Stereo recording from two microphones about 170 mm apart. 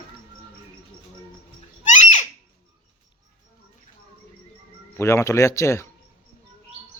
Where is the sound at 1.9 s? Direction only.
45° left (ahead or behind).